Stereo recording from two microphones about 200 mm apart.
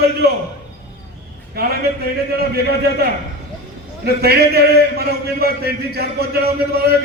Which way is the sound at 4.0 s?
55° right (ahead or behind).